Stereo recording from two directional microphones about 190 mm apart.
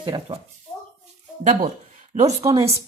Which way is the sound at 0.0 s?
25° right (ahead or behind).